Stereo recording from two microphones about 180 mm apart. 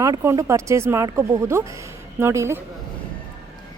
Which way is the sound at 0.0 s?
15° right (ahead or behind).